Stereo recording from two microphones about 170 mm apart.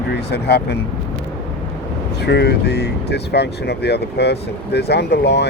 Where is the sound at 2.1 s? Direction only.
75° left (ahead or behind).